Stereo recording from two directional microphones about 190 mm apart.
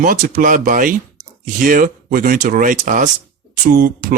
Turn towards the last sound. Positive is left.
turn(degrees=-50)  # may be behind; listen again after turning